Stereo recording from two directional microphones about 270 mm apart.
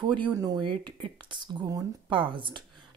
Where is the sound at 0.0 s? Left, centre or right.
Centre.